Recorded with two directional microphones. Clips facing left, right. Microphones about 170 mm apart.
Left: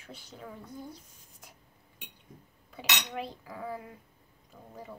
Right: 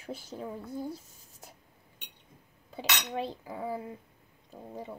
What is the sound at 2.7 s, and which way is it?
Cutlery, 30° right (ahead or behind).